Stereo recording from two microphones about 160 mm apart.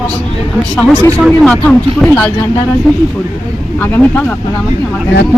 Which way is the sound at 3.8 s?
10° left (ahead or behind).